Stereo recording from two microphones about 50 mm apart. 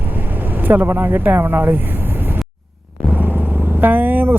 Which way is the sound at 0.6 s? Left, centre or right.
Right.